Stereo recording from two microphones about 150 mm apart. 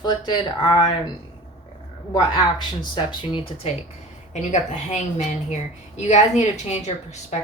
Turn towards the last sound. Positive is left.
turn(degrees=50)  # may be behind; listen again after turning